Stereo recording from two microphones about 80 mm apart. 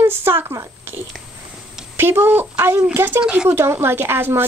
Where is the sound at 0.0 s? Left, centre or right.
Right.